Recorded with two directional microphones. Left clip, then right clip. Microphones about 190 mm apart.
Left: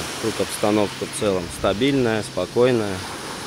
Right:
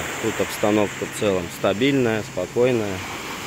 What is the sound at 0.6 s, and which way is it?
Speech, 5° left (ahead or behind).